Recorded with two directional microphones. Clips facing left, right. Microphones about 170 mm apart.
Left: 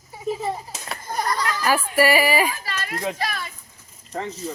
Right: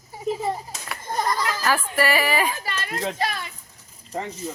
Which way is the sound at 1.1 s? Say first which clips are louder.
Even; 25° right (ahead or behind).